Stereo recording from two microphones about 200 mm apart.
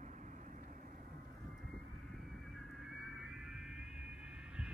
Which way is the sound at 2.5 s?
Centre (ahead or behind).